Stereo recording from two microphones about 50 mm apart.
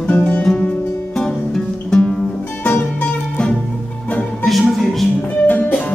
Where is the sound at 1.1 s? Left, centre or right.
Centre.